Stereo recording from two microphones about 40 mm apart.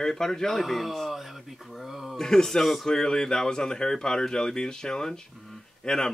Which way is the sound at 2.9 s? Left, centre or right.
Centre.